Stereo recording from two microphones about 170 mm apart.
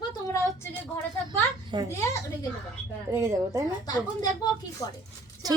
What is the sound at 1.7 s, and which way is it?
Speech, 25° right (ahead or behind).